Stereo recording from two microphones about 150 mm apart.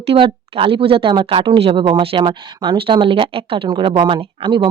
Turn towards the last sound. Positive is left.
turn(degrees=-35)  # may be behind; listen again after turning